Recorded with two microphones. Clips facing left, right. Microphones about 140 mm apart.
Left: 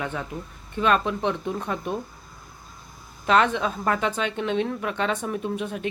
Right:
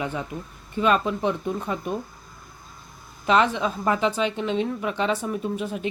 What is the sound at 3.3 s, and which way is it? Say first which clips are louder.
Speech: even; 5° right (ahead or behind).